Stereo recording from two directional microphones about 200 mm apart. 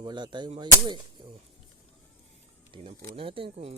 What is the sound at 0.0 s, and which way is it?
Speech, 20° right (ahead or behind).